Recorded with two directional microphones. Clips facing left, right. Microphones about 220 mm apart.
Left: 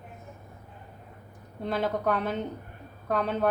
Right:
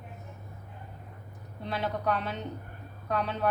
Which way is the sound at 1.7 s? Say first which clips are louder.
Left 4 dB; 50° left (ahead or behind).